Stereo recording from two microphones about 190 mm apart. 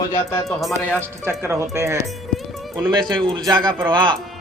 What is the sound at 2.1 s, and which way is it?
Music, centre (ahead or behind).